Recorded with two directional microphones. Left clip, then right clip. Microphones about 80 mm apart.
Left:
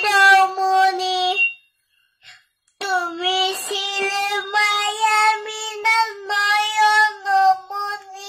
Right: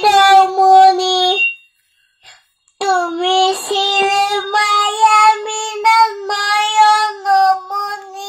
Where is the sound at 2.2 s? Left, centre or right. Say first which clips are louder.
Right 3 dB; right.